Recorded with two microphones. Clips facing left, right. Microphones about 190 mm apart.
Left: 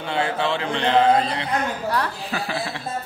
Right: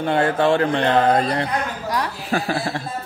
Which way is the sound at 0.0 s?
50° right (ahead or behind).